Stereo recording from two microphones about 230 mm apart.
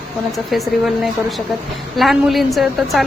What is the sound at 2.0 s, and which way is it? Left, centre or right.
A woman's voice, centre.